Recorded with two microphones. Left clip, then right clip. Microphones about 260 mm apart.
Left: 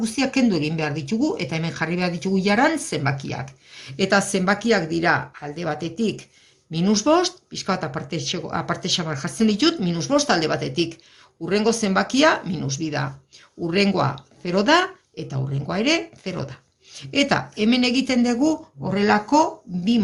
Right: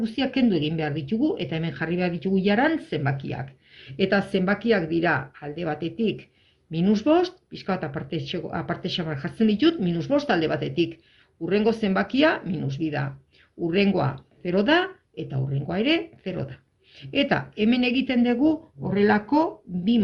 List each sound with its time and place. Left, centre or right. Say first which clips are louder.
0.0 s speech: left 3 dB; centre